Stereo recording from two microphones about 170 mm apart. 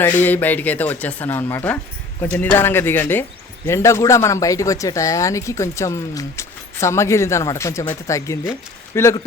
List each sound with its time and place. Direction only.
0.0 s speech: 10° left (ahead or behind)